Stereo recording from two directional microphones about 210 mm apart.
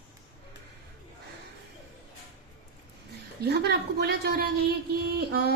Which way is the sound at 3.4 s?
50° right (ahead or behind).